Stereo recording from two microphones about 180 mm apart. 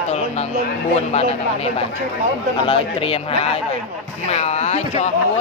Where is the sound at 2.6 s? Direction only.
30° left (ahead or behind).